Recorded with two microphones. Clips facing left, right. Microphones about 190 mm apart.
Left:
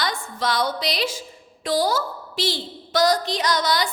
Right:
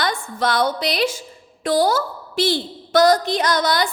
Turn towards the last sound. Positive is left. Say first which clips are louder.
# right 3 dB
turn(degrees=-50)  # may be behind; listen again after turning